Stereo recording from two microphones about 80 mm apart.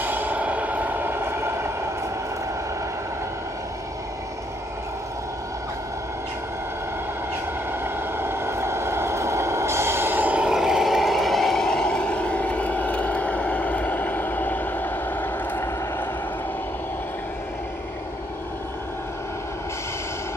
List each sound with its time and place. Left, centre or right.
0.0 s vehicle: right
7.8 s vehicle: right
10.5 s vehicle: centre; by 15.7 s left